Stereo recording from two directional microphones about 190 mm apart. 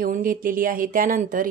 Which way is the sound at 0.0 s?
45° right (ahead or behind).